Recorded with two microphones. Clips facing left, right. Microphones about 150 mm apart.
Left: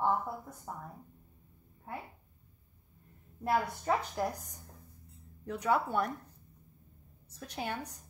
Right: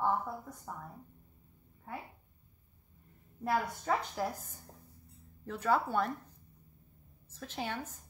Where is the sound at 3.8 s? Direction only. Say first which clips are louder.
Left 2 dB; 10° left (ahead or behind).